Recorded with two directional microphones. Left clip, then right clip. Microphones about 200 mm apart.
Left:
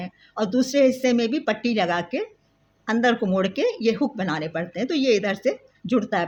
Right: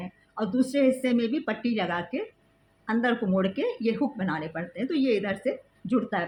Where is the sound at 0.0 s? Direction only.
50° left (ahead or behind).